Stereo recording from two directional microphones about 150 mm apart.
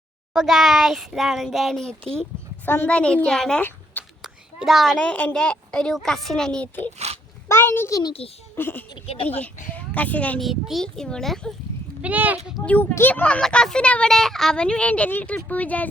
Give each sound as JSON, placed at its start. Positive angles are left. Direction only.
{"t": 0.3, "sound": "a woman's voice", "side_deg": -5}
{"t": 4.2, "sound": "a woman's voice", "side_deg": 0}
{"t": 8.9, "sound": "speech", "side_deg": 35}
{"t": 9.2, "sound": "a woman's voice", "side_deg": 10}
{"t": 12.0, "sound": "speech", "side_deg": -10}
{"t": 12.6, "sound": "speech", "side_deg": 10}